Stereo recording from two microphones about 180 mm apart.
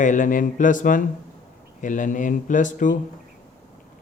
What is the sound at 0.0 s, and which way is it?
A man's voice, 45° left (ahead or behind).